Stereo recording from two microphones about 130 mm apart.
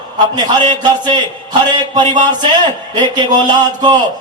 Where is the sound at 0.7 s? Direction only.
35° right (ahead or behind).